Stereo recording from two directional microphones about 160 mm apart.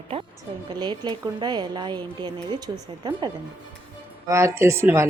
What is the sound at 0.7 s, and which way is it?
A woman's voice, 30° right (ahead or behind).